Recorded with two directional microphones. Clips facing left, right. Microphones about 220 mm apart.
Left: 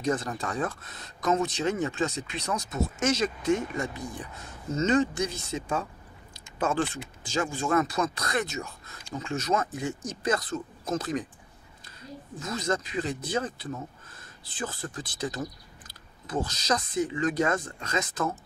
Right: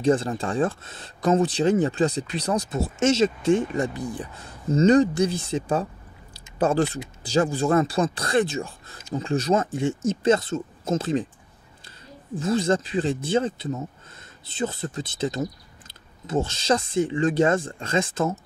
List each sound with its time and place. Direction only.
0.0 s speech: 30° right (ahead or behind)
12.4 s speech: 30° right (ahead or behind)